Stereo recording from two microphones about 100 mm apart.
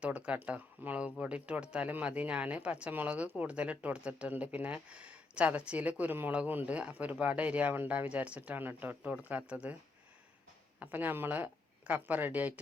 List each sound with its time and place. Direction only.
0.0 s speech: 10° right (ahead or behind)
10.8 s speech: 20° right (ahead or behind)